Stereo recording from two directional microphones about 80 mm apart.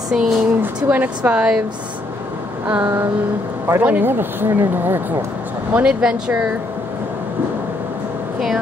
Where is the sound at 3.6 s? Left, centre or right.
Right.